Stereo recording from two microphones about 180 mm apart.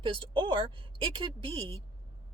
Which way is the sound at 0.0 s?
30° right (ahead or behind).